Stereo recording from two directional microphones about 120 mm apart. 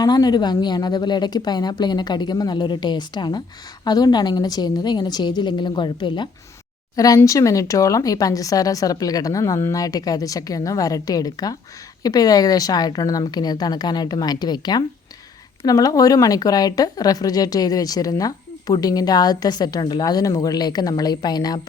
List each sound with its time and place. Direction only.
0.0 s speech: 35° left (ahead or behind)
6.9 s speech: 30° left (ahead or behind)